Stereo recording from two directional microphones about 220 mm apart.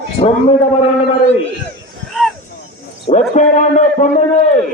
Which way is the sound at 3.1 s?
35° left (ahead or behind).